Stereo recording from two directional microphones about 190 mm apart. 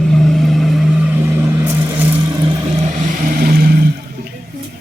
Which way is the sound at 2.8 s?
40° right (ahead or behind).